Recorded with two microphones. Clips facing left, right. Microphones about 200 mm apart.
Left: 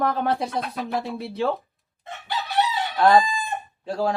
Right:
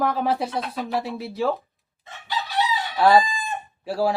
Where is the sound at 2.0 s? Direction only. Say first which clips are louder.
Even; 55° left (ahead or behind).